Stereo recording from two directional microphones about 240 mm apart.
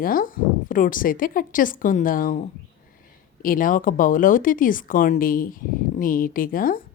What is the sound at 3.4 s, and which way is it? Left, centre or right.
Speech, left.